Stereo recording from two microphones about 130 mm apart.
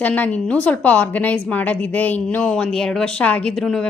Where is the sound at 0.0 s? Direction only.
10° left (ahead or behind).